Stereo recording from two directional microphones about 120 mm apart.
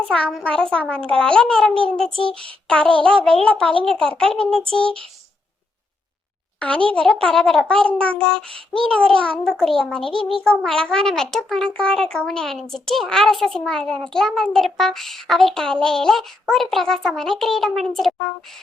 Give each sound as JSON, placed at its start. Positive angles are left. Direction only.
{"t": 0.0, "sound": "a child's voice", "side_deg": 5}
{"t": 6.6, "sound": "a child's voice", "side_deg": 10}